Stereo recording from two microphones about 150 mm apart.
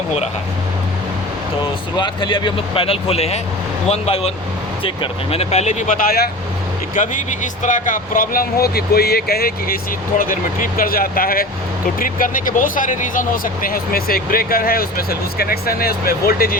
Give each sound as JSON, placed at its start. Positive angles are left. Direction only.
{"t": 2.0, "sound": "speech", "side_deg": 30}
{"t": 5.3, "sound": "speech", "side_deg": 45}
{"t": 6.0, "sound": "speech", "side_deg": 85}
{"t": 6.9, "sound": "speech", "side_deg": 60}
{"t": 10.2, "sound": "speech", "side_deg": 70}